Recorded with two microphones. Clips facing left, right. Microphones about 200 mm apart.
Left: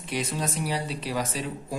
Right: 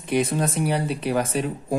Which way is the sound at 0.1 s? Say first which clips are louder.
Right 8 dB; 55° right (ahead or behind).